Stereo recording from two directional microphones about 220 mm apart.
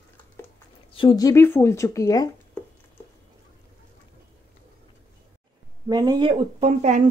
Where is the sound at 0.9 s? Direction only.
20° left (ahead or behind).